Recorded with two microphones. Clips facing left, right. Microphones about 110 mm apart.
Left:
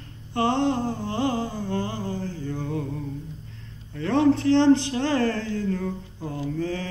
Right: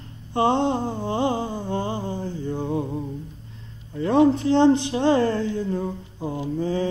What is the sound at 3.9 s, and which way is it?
Speech, 15° right (ahead or behind).